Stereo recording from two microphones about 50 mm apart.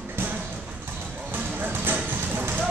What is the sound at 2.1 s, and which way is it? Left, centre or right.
Clip-clop, right.